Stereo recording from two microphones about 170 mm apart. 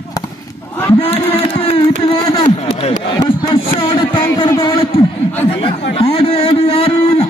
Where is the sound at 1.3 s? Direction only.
35° left (ahead or behind).